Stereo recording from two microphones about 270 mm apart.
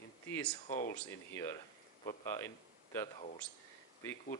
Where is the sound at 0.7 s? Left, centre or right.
Left.